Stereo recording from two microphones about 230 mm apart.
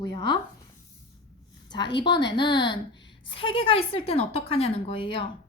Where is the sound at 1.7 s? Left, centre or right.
Centre.